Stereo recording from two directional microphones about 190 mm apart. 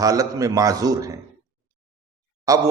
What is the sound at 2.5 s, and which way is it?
Speech, 15° right (ahead or behind).